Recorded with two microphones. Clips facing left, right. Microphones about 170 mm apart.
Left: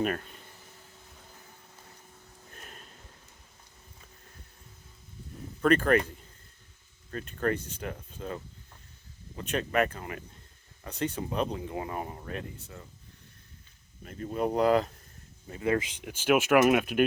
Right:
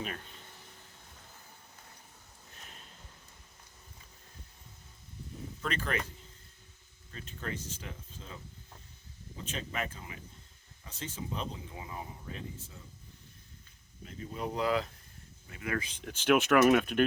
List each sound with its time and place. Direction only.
5.6 s speech: 55° left (ahead or behind)
7.1 s speech: 55° left (ahead or behind)
14.0 s speech: 50° left (ahead or behind)
15.5 s speech: 30° left (ahead or behind)
15.8 s speech: 15° left (ahead or behind)